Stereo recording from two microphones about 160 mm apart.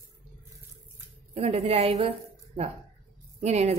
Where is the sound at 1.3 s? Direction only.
40° right (ahead or behind).